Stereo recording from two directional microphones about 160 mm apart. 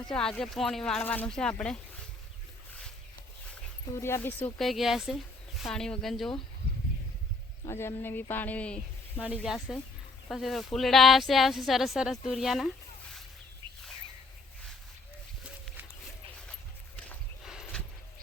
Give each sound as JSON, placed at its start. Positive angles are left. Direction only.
{"t": 0.1, "sound": "speech", "side_deg": 5}
{"t": 3.9, "sound": "speech", "side_deg": 15}
{"t": 4.4, "sound": "speech", "side_deg": 0}
{"t": 7.6, "sound": "speech", "side_deg": 15}
{"t": 9.2, "sound": "speech", "side_deg": -5}
{"t": 15.4, "sound": "a sound", "side_deg": -5}
{"t": 17.4, "sound": "a sound", "side_deg": 0}